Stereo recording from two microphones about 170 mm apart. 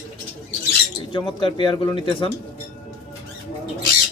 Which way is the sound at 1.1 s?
25° left (ahead or behind).